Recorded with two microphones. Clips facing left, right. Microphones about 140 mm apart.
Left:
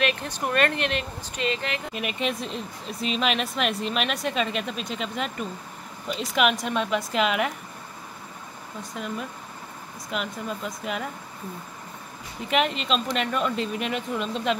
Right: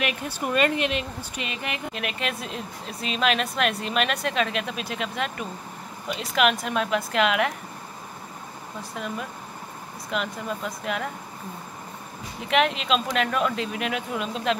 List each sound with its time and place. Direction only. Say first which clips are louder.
0.0 s speech: left 2 dB; 10° right (ahead or behind)
0.7 s speech: right 1 dB; 55° left (ahead or behind)
1.3 s speech: left 6 dB; 15° right (ahead or behind)
2.0 s speech: left 5 dB; centre (ahead or behind)
9.0 s speech: right 1 dB; centre (ahead or behind)
10.1 s speech: right 1 dB; centre (ahead or behind)
12.4 s speech: right 2 dB; centre (ahead or behind)